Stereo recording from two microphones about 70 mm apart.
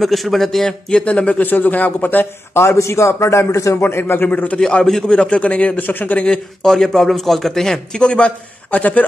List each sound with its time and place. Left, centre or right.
0.0 s a man's voice: centre; by 2.2 s left
2.5 s a man's voice: left
4.6 s a man's voice: centre; by 6.2 s left
6.2 s a man's voice: centre